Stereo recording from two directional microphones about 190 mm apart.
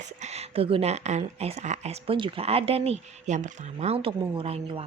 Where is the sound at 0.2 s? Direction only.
35° right (ahead or behind).